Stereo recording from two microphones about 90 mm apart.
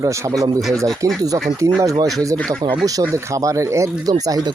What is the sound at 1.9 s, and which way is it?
Speech, 40° right (ahead or behind).